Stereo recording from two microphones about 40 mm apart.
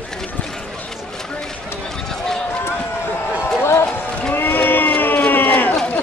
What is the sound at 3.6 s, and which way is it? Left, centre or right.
Run, left.